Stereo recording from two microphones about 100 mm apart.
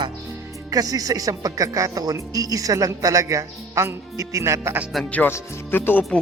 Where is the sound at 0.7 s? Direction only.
35° right (ahead or behind).